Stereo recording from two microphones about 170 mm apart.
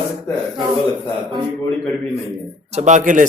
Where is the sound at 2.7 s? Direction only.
45° right (ahead or behind).